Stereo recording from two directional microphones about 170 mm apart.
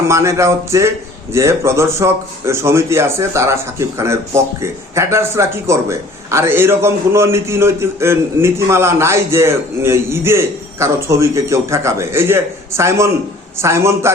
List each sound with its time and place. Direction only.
0.1 s a man's voice: 15° right (ahead or behind)